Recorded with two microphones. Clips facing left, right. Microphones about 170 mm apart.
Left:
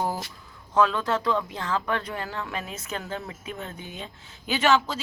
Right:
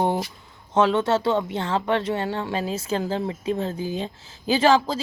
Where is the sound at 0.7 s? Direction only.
25° right (ahead or behind).